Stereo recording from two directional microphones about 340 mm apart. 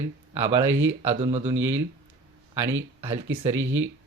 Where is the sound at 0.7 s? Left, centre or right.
Right.